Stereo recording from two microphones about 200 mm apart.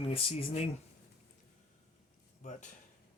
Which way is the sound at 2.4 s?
40° left (ahead or behind).